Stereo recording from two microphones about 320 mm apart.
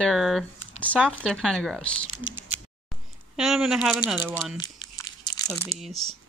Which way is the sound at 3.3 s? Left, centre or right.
Centre.